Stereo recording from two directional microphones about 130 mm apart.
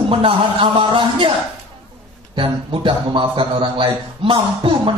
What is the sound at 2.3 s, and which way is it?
Speech, 40° right (ahead or behind).